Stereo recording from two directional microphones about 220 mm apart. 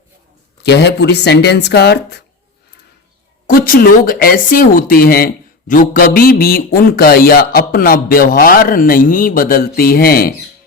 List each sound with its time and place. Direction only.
0.6 s speech: 50° left (ahead or behind)
3.4 s speech: 40° left (ahead or behind)